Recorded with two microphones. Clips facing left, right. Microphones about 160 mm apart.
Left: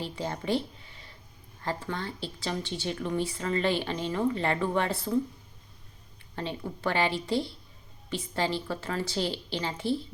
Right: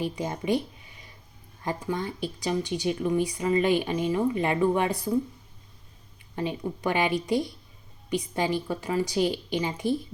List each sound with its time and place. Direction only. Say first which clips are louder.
0.0 s speech: right 4 dB; 15° right (ahead or behind)
6.3 s speech: right 5 dB; 15° right (ahead or behind)